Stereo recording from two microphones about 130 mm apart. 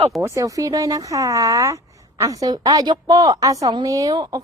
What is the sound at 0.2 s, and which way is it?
Speech, 25° right (ahead or behind).